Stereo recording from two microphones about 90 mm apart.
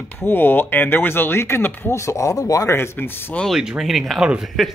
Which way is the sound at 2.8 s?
25° left (ahead or behind).